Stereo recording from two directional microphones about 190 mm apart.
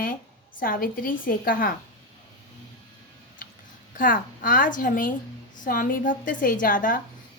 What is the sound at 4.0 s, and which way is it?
A woman's voice, 45° left (ahead or behind).